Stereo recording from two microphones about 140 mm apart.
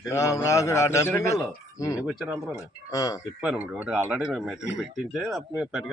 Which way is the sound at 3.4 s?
10° right (ahead or behind).